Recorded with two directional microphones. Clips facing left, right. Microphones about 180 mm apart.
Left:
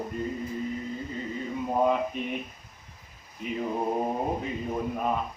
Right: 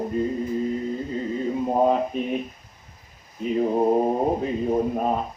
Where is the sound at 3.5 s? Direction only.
35° right (ahead or behind).